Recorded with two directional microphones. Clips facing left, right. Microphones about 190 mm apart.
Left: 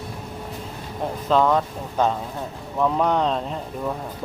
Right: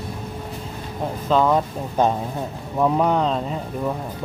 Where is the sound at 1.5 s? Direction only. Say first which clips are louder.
Right 2 dB; 15° right (ahead or behind).